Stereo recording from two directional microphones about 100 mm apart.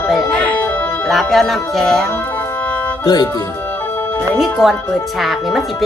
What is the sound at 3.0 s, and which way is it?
Speech, 45° left (ahead or behind).